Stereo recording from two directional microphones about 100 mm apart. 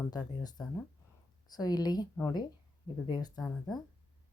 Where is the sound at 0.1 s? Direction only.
45° left (ahead or behind).